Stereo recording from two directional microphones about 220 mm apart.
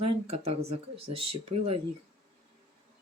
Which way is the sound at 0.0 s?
30° right (ahead or behind).